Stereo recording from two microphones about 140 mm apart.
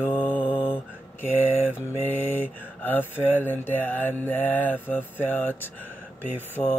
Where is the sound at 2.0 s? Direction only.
15° left (ahead or behind).